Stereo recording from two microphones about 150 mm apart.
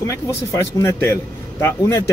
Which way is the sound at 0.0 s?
20° left (ahead or behind).